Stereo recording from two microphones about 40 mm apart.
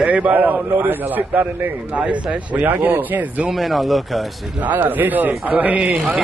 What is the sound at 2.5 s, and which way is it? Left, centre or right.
Speech, right.